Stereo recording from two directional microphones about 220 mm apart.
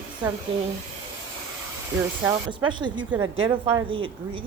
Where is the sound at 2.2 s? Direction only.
20° right (ahead or behind).